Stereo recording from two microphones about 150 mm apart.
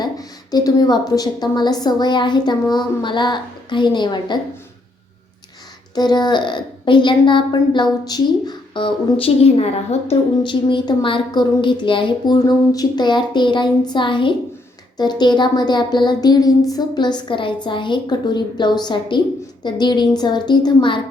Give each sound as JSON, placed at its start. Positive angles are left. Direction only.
{"t": 0.0, "sound": "a woman's voice", "side_deg": 25}
{"t": 5.9, "sound": "a woman's voice", "side_deg": 30}